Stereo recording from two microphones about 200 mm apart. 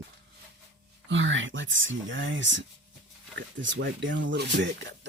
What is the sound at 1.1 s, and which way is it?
Speech, 70° right (ahead or behind).